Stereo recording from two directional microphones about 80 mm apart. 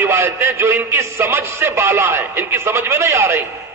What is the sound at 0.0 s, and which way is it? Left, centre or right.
A man's voice, right.